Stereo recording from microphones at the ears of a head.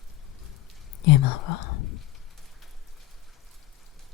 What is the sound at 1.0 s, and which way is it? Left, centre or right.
Speech, left.